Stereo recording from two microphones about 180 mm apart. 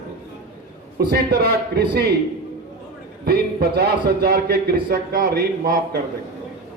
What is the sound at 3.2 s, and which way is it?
Speech, 60° right (ahead or behind).